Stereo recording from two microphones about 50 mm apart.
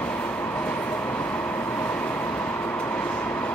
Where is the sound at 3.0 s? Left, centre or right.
Left.